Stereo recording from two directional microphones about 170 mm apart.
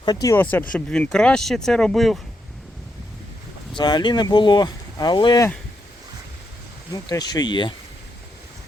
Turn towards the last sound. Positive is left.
turn(degrees=25)  # may be behind; listen again after turning